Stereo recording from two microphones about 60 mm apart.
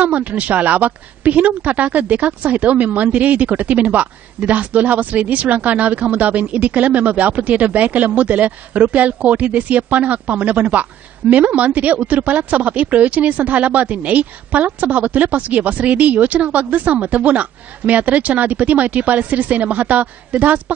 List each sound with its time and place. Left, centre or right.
0.0 s a woman's voice: right